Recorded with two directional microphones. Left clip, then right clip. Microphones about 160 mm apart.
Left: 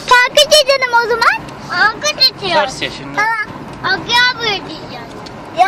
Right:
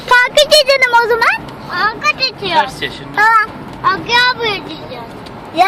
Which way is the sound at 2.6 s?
40° left (ahead or behind).